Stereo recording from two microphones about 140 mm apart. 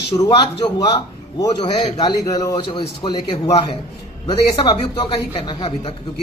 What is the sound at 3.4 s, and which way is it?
A man's voice, 45° left (ahead or behind).